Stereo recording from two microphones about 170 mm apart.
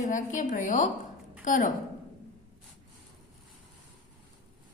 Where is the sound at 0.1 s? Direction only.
50° left (ahead or behind).